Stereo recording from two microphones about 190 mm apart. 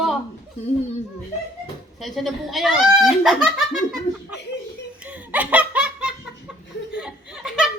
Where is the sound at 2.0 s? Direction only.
Centre (ahead or behind).